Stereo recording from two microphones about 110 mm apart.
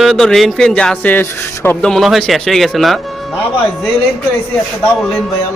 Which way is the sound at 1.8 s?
Centre (ahead or behind).